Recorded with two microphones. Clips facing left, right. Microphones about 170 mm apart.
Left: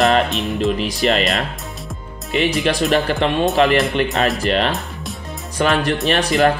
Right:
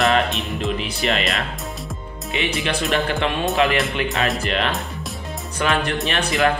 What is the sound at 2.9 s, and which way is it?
Speech, 40° left (ahead or behind).